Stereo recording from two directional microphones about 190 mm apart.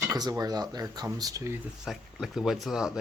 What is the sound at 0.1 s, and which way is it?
Speech, 20° right (ahead or behind).